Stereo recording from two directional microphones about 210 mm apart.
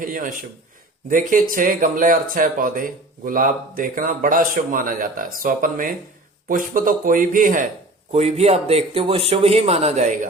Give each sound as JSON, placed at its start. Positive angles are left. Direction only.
{"t": 0.0, "sound": "speech", "side_deg": -40}